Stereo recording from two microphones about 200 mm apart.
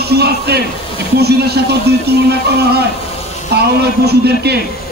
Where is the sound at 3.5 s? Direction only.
55° right (ahead or behind).